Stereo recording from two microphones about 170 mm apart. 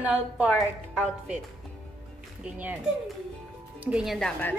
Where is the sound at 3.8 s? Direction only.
5° right (ahead or behind).